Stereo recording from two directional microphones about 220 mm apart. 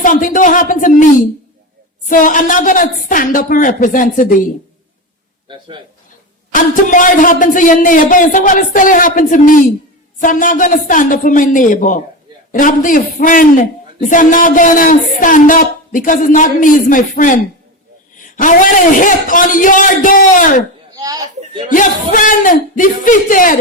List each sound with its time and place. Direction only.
0.0 s speech: 35° left (ahead or behind)
5.5 s a man's voice: 20° right (ahead or behind)
6.5 s speech: 35° left (ahead or behind)
20.9 s a sound: 15° right (ahead or behind)
21.7 s speech: 35° left (ahead or behind)